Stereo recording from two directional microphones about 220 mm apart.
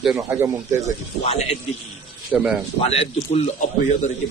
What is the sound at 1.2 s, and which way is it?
Speech, 25° left (ahead or behind).